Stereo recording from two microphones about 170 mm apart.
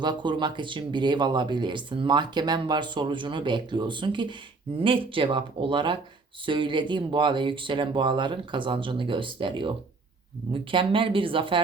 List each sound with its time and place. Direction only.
0.0 s speech: 25° right (ahead or behind)